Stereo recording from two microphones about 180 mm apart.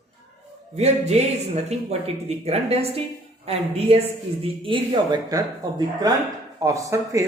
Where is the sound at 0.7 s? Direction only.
35° right (ahead or behind).